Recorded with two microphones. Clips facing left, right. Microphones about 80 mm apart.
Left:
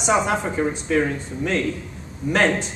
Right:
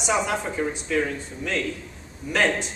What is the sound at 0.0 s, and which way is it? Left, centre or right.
A man's voice, left.